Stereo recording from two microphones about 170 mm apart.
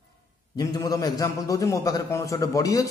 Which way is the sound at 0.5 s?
20° left (ahead or behind).